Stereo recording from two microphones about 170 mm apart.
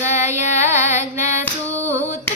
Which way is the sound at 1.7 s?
15° right (ahead or behind).